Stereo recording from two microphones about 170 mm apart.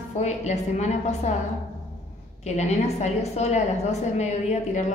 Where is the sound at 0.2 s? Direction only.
40° left (ahead or behind).